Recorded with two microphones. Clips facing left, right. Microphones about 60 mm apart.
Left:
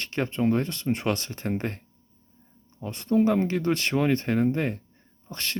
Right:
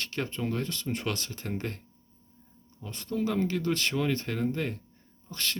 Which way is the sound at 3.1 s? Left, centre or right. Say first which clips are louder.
Left 7 dB; left.